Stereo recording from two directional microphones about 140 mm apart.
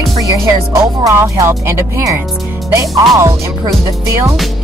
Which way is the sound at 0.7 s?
20° right (ahead or behind).